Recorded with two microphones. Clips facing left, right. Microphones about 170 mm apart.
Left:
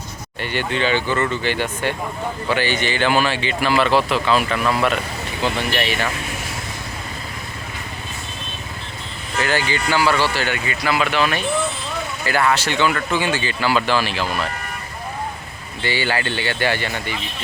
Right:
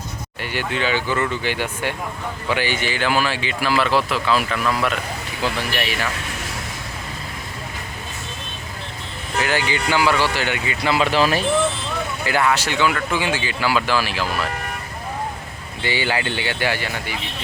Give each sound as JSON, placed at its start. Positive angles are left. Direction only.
{"t": 0.4, "sound": "speech", "side_deg": -5}
{"t": 5.7, "sound": "speech", "side_deg": -5}
{"t": 9.4, "sound": "speech", "side_deg": -15}
{"t": 12.2, "sound": "speech", "side_deg": -15}
{"t": 15.8, "sound": "speech", "side_deg": -15}